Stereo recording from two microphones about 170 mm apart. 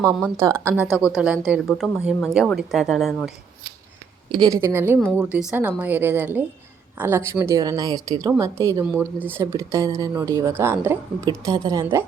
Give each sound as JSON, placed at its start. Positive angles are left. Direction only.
{"t": 0.2, "sound": "speech", "side_deg": -15}
{"t": 0.9, "sound": "speech", "side_deg": 0}
{"t": 4.3, "sound": "a woman's voice", "side_deg": -25}